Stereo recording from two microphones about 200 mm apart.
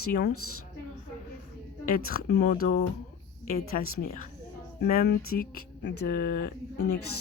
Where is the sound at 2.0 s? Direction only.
45° left (ahead or behind).